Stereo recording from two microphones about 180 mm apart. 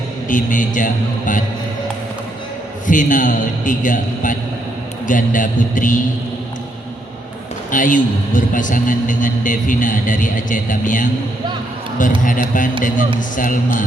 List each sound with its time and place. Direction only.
0.3 s a man's voice: 45° left (ahead or behind)
2.8 s a man's voice: 45° left (ahead or behind)
7.7 s a man's voice: 45° left (ahead or behind)
12.2 s a man's voice: 45° left (ahead or behind)